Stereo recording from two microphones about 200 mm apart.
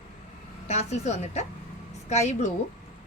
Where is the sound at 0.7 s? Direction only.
35° left (ahead or behind).